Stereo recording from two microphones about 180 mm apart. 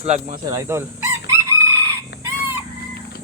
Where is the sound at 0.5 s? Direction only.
15° right (ahead or behind).